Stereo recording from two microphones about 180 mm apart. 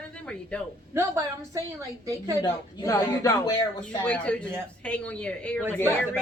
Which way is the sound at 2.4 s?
20° left (ahead or behind).